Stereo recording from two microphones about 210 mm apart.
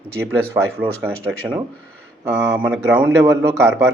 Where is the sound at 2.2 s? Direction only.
10° right (ahead or behind).